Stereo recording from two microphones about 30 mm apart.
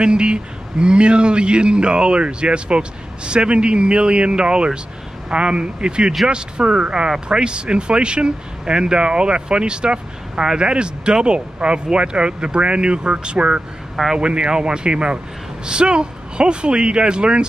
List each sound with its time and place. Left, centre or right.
0.0 s speech: right